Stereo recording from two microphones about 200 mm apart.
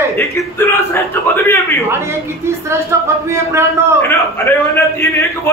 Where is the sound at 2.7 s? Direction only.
15° right (ahead or behind).